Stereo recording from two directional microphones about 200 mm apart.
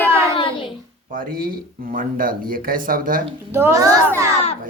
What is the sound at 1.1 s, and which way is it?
Speech, 45° right (ahead or behind).